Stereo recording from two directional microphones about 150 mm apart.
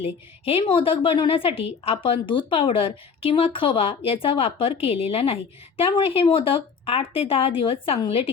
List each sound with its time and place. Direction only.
0.0 s a woman's voice: 40° left (ahead or behind)